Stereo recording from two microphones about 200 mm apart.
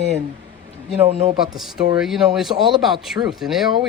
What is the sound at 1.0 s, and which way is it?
Speech, 30° right (ahead or behind).